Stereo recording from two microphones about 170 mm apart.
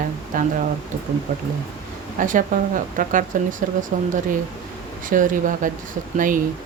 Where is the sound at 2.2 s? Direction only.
50° right (ahead or behind).